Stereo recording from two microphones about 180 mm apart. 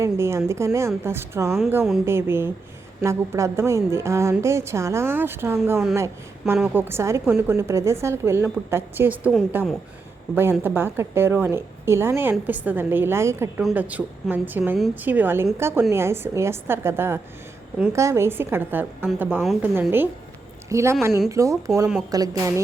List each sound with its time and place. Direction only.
0.0 s a woman's voice: 15° right (ahead or behind)
2.0 s a woman's voice: 15° right (ahead or behind)
20.7 s a woman's voice: 15° right (ahead or behind)